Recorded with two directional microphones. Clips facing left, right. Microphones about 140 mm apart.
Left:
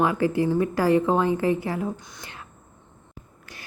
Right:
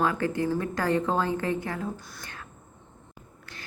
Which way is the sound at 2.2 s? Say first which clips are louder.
Left 2 dB; 20° left (ahead or behind).